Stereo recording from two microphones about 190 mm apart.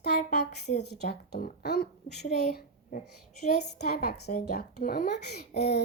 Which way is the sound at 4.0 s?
55° left (ahead or behind).